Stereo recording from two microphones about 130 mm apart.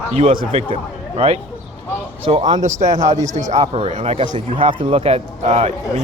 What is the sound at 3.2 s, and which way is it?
Speech, 70° right (ahead or behind).